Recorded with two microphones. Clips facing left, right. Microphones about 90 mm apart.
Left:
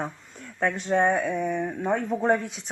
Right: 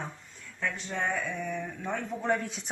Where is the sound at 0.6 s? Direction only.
60° left (ahead or behind); by 2.4 s 40° left (ahead or behind).